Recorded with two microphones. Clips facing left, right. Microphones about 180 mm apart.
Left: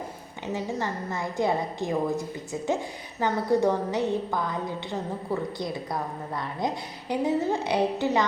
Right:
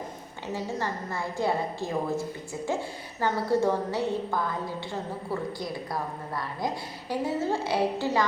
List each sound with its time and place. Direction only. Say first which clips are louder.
0.5 s a woman's voice: left 1 dB; 15° left (ahead or behind)